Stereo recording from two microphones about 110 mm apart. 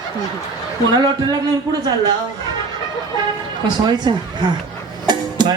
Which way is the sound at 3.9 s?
40° right (ahead or behind).